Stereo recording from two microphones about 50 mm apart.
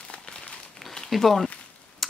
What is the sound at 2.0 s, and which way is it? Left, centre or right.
Computer keyboard, centre.